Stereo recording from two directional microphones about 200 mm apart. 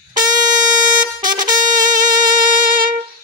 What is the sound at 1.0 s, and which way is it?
Brass instrument, 40° right (ahead or behind).